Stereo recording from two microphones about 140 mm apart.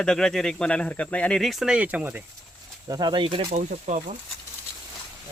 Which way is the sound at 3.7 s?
60° right (ahead or behind).